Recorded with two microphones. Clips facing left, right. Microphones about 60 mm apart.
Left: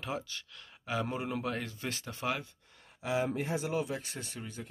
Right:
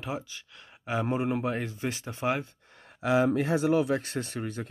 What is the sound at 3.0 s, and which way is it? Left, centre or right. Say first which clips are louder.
Speech: right 8 dB; right.